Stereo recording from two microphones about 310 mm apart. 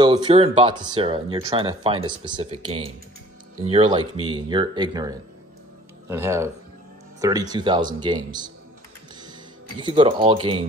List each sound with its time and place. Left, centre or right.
0.0 s speech: centre
9.8 s speech: centre